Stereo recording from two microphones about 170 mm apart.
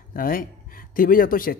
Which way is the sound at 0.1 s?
55° left (ahead or behind).